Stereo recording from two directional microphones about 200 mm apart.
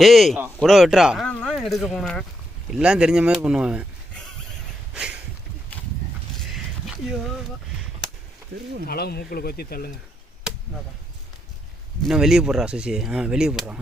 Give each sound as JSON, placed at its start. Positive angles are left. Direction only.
{"t": 0.0, "sound": "speech", "side_deg": 0}
{"t": 6.8, "sound": "speech", "side_deg": 0}
{"t": 8.9, "sound": "speech", "side_deg": 50}
{"t": 12.0, "sound": "speech", "side_deg": 0}